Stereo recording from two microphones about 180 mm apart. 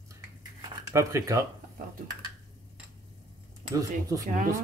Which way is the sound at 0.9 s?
15° right (ahead or behind).